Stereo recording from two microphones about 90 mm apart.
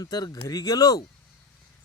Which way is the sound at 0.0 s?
45° left (ahead or behind).